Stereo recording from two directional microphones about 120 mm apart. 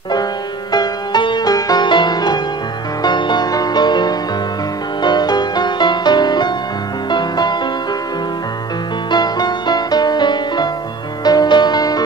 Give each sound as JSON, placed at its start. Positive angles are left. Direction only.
{"t": 0.1, "sound": "music", "side_deg": 35}
{"t": 9.1, "sound": "music", "side_deg": 35}